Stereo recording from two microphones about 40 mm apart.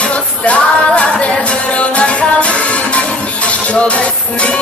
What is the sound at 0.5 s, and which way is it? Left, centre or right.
Music, left.